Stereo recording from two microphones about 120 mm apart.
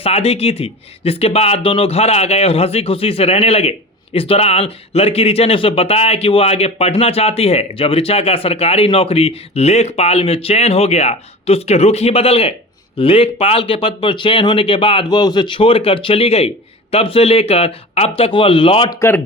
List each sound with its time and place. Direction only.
0.0 s speech: 60° left (ahead or behind)
18.9 s speech: 20° left (ahead or behind)